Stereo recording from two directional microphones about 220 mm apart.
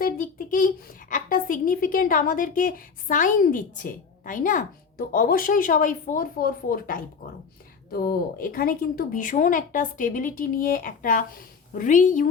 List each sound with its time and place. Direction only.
0.0 s a child's voice: 40° left (ahead or behind)